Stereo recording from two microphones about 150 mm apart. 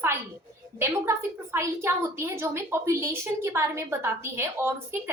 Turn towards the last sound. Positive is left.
turn(degrees=-15)  # may be behind; listen again after turning